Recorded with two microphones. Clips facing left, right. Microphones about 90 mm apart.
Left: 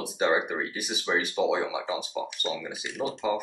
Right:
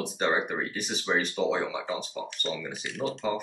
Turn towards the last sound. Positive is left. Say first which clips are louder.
# left 1 dB
turn(degrees=10)  # may be behind; listen again after turning